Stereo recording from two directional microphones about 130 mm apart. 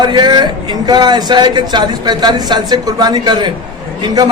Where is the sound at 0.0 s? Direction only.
35° right (ahead or behind).